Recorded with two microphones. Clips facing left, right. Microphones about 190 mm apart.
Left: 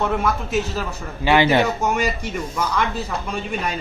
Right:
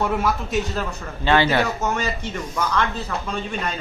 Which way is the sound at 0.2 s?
5° left (ahead or behind).